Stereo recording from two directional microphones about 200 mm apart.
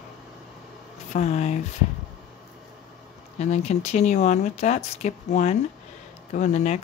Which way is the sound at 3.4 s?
35° left (ahead or behind).